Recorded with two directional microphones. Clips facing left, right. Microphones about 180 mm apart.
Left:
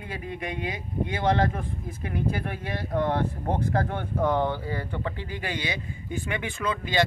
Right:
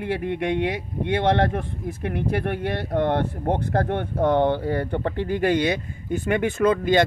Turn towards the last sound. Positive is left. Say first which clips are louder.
# right 8 dB
turn(degrees=-50)  # may be behind; listen again after turning